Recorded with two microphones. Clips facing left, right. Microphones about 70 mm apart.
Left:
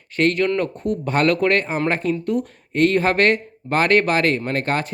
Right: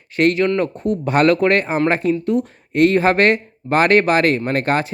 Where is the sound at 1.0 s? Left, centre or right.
Right.